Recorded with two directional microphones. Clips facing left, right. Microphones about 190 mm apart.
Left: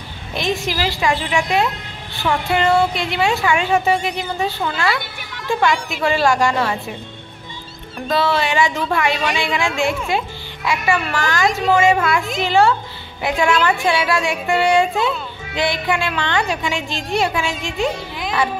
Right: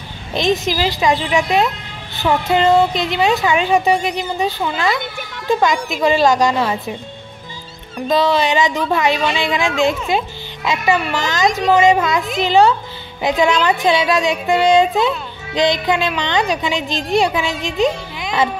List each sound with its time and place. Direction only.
0.3 s a child's voice: 20° right (ahead or behind)
8.1 s a child's voice: 15° right (ahead or behind)